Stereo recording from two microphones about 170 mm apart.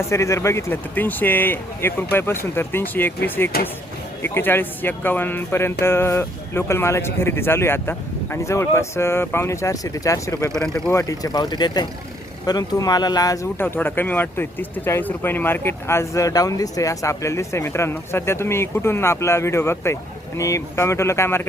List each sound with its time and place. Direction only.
0.0 s speech: 15° left (ahead or behind)
10.5 s speech: 5° left (ahead or behind)
10.9 s speech: 20° left (ahead or behind)